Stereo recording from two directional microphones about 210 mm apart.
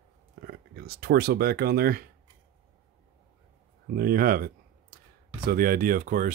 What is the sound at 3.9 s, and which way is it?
Speech, 45° right (ahead or behind).